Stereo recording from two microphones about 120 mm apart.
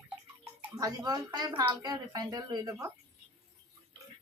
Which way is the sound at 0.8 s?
30° right (ahead or behind).